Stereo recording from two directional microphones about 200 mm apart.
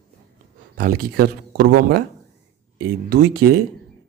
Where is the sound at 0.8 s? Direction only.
50° right (ahead or behind).